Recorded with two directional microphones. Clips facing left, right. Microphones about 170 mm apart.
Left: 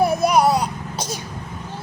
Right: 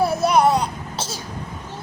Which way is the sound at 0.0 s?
10° left (ahead or behind).